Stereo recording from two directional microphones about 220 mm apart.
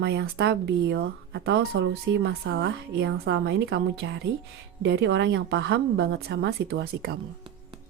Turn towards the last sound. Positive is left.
turn(degrees=-45)  # may be behind; listen again after turning